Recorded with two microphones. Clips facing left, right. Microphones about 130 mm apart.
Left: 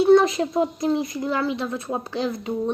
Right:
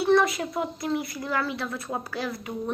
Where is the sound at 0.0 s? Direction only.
20° left (ahead or behind).